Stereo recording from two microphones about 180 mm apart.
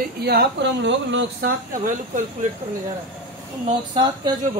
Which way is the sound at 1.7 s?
45° right (ahead or behind).